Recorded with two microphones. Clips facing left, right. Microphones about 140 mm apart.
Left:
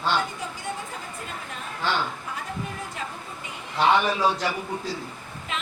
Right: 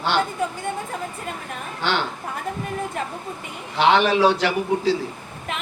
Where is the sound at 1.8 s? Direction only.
80° right.